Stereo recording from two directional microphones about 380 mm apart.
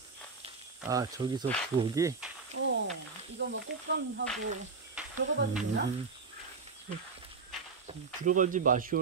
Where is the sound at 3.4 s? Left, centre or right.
Right.